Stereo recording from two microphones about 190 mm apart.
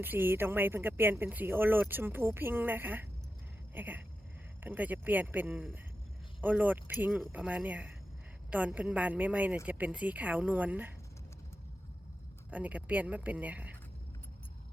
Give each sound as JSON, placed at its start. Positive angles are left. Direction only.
{"t": 0.0, "sound": "speech", "side_deg": -10}
{"t": 12.5, "sound": "speech", "side_deg": -10}